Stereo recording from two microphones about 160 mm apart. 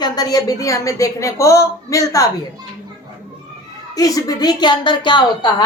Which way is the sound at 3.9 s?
25° left (ahead or behind).